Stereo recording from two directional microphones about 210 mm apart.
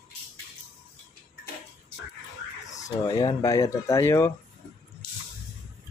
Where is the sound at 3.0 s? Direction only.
20° left (ahead or behind).